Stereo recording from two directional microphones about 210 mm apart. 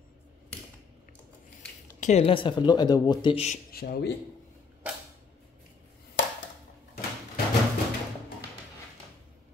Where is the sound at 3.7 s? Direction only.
45° left (ahead or behind).